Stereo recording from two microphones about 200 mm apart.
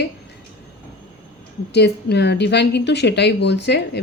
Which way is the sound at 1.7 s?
55° left (ahead or behind).